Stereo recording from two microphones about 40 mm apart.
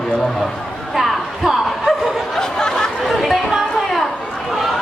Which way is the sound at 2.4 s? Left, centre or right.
Centre.